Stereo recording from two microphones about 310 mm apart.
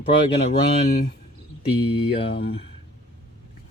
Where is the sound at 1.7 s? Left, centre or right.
Centre.